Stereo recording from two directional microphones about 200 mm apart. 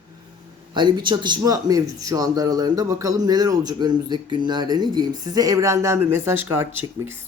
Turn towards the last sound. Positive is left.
turn(degrees=-10)  # may be behind; listen again after turning